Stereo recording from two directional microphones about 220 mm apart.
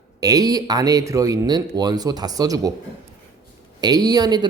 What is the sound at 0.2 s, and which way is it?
A man's voice, 15° right (ahead or behind).